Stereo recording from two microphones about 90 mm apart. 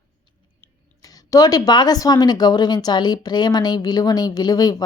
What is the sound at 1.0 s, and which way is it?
Speech, 40° left (ahead or behind).